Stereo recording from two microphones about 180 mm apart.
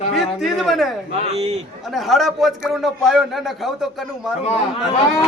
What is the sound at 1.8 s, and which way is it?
A man's voice, centre (ahead or behind).